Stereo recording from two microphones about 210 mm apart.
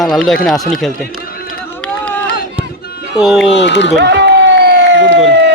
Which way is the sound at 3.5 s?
55° left (ahead or behind).